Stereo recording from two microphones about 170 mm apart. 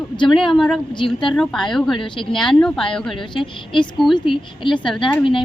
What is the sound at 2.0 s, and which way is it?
Speech, 30° left (ahead or behind).